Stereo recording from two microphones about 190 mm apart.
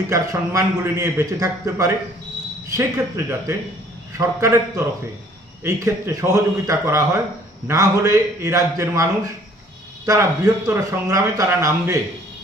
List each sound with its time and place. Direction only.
0.1 s speech: 15° right (ahead or behind)